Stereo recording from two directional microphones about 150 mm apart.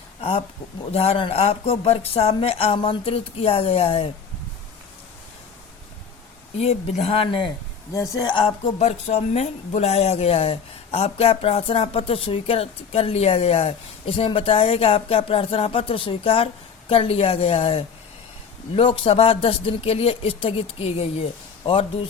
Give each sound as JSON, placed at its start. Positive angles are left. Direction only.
{"t": 0.2, "sound": "speech", "side_deg": 40}
{"t": 6.6, "sound": "speech", "side_deg": 45}
{"t": 7.9, "sound": "speech", "side_deg": 20}
{"t": 8.8, "sound": "speech", "side_deg": 45}